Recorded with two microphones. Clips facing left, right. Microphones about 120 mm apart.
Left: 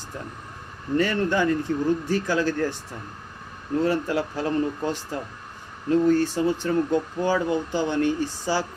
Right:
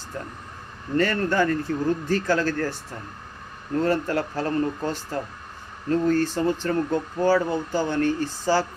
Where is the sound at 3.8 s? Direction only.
10° left (ahead or behind).